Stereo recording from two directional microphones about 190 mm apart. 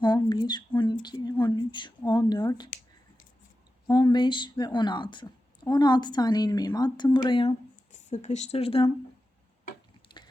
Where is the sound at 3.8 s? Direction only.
20° left (ahead or behind).